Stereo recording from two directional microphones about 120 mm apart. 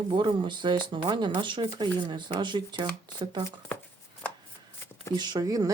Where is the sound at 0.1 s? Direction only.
40° right (ahead or behind).